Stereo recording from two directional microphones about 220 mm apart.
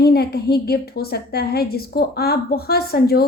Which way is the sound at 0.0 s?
45° left (ahead or behind).